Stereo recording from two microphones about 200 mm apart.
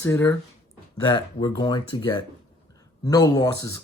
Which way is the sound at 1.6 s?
20° left (ahead or behind).